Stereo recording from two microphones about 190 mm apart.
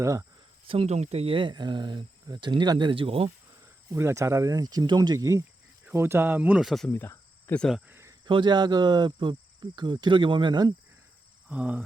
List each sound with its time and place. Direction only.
0.0 s speech: 15° right (ahead or behind)
0.7 s speech: 30° right (ahead or behind)
3.8 s speech: 15° right (ahead or behind); by 7.8 s 5° left (ahead or behind)
7.9 s cricket: 10° right (ahead or behind)
8.2 s speech: 25° right (ahead or behind)
11.4 s cricket: 5° right (ahead or behind)